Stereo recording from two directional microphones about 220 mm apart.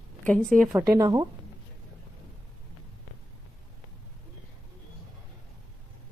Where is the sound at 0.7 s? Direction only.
15° right (ahead or behind).